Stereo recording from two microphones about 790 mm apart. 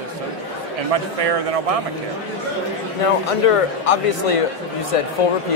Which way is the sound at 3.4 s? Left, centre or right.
Left.